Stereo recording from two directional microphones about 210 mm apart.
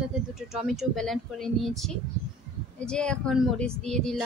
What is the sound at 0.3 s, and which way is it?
A woman's voice, centre (ahead or behind).